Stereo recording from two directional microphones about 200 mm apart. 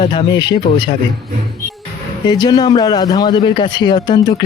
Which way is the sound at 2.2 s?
20° left (ahead or behind).